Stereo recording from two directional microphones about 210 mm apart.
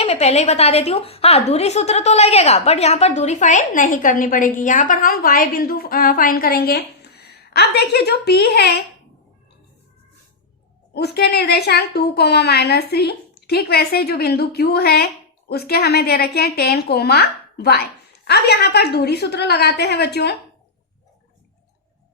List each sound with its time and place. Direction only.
0.0 s a woman's voice: 30° left (ahead or behind); by 8.7 s 50° left (ahead or behind)
10.9 s a woman's voice: 50° left (ahead or behind)